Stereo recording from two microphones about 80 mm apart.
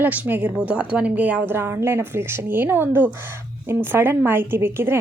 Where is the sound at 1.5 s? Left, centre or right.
Right.